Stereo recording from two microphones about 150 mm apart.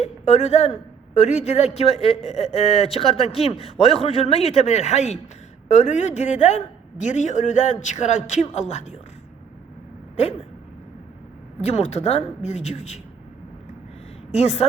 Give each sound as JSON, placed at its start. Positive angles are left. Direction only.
{"t": 0.0, "sound": "a sound", "side_deg": 50}
{"t": 1.1, "sound": "a man's voice", "side_deg": 50}
{"t": 11.6, "sound": "a man's voice", "side_deg": 45}
{"t": 14.3, "sound": "a man's voice", "side_deg": 45}